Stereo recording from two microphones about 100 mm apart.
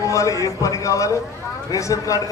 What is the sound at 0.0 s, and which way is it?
A man's voice, 30° left (ahead or behind).